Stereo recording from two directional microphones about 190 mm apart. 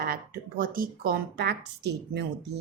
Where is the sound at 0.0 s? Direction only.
50° right (ahead or behind).